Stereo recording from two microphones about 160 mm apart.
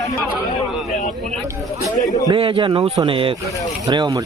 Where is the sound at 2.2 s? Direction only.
35° right (ahead or behind).